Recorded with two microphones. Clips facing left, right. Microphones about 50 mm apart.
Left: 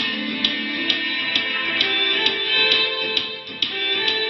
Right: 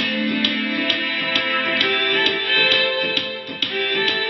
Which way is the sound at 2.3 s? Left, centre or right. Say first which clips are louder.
Right 2 dB; centre.